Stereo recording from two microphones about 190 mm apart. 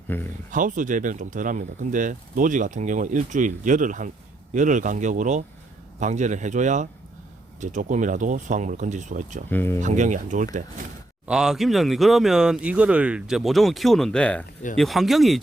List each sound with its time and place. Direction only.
0.1 s speech: 10° left (ahead or behind)
0.5 s speech: 45° right (ahead or behind)
9.5 s speech: 10° left (ahead or behind)
9.8 s speech: 40° right (ahead or behind)
11.3 s speech: 5° right (ahead or behind)